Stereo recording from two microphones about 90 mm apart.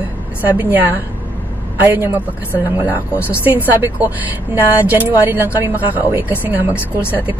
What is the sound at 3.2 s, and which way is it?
Speech, 20° right (ahead or behind).